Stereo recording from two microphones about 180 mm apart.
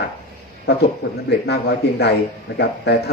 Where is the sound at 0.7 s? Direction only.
65° left (ahead or behind).